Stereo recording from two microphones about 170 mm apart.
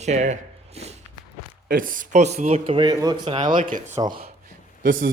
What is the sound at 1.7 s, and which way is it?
Speech, 55° right (ahead or behind).